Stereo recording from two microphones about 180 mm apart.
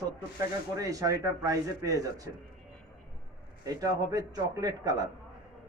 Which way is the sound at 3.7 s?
20° right (ahead or behind).